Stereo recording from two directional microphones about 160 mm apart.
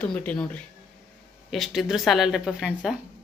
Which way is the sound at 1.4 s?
Centre (ahead or behind).